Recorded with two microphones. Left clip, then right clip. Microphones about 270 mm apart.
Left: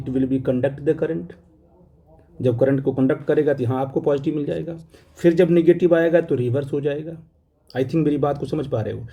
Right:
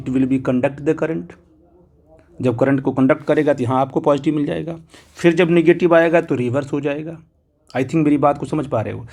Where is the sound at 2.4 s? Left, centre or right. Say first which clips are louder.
Right 2 dB; centre.